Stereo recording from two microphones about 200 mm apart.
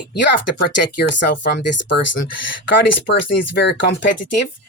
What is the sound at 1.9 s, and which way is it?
Speech, 65° left (ahead or behind).